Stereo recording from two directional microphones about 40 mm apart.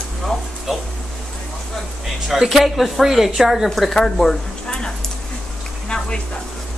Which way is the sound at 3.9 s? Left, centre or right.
Centre.